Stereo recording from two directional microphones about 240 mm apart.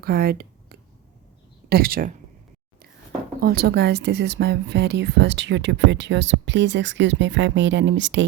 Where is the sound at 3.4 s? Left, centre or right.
Right.